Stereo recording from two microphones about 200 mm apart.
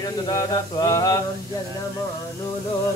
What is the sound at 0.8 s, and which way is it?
Mantra, 15° left (ahead or behind).